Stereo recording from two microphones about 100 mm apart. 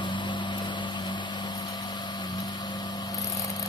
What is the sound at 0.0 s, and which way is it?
Vehicle, 50° left (ahead or behind).